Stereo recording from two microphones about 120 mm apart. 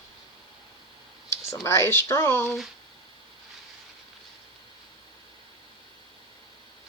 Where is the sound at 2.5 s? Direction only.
Centre (ahead or behind).